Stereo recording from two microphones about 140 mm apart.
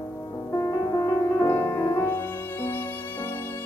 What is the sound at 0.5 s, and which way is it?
Music, 20° left (ahead or behind).